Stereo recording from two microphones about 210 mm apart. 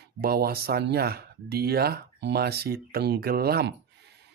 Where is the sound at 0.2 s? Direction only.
45° right (ahead or behind).